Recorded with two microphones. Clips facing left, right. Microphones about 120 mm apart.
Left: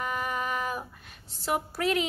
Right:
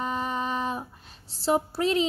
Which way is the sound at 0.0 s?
30° right (ahead or behind).